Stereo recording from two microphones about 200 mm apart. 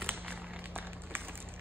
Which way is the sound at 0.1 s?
10° right (ahead or behind).